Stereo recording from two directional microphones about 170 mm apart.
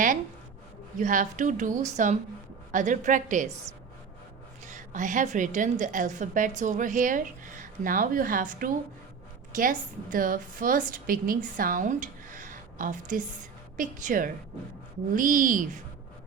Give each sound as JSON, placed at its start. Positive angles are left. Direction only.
{"t": 0.9, "sound": "speech", "side_deg": -50}
{"t": 4.7, "sound": "a woman's voice", "side_deg": -45}